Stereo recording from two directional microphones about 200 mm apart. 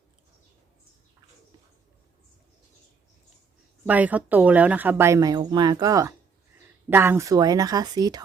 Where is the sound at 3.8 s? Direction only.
10° right (ahead or behind).